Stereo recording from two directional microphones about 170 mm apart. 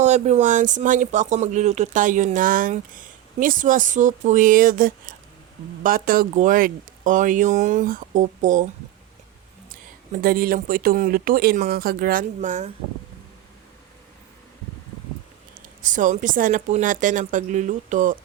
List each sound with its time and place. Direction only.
0.0 s speech: 45° right (ahead or behind)
10.1 s speech: 60° right (ahead or behind)
15.8 s speech: 50° right (ahead or behind)